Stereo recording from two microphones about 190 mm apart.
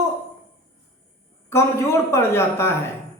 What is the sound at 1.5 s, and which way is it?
A man's voice, 15° left (ahead or behind).